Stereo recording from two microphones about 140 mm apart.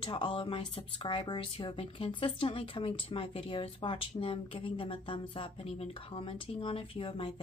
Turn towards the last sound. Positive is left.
turn(degrees=40)  # may be behind; listen again after turning